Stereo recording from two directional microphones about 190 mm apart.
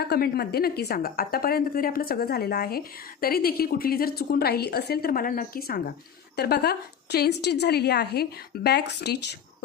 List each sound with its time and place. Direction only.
0.0 s a woman's voice: 55° left (ahead or behind)